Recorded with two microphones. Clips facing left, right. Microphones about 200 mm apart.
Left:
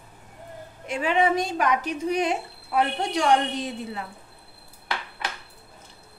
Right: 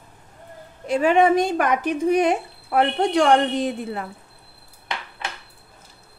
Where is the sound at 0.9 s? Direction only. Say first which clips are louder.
Right 6 dB; 45° right (ahead or behind).